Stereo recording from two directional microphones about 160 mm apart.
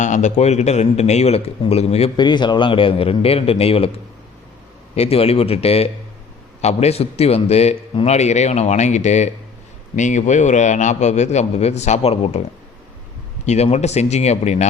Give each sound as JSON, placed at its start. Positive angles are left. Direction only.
{"t": 0.0, "sound": "a man's voice", "side_deg": 50}
{"t": 2.1, "sound": "speech", "side_deg": 25}
{"t": 4.9, "sound": "a man's voice", "side_deg": 40}